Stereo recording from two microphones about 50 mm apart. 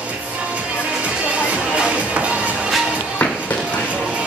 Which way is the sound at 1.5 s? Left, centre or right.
Right.